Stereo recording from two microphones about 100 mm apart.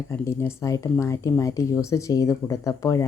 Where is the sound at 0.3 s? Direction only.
30° left (ahead or behind).